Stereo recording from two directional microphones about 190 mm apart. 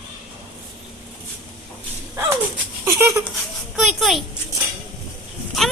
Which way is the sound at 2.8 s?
15° right (ahead or behind).